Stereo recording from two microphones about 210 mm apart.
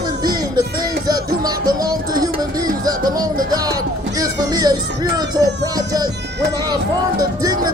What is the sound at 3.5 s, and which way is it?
Music, 20° right (ahead or behind).